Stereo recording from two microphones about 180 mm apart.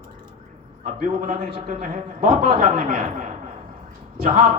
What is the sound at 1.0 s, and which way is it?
Speech, 40° right (ahead or behind).